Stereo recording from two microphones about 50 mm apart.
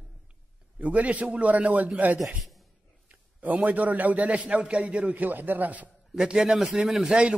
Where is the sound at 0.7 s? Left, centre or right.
Right.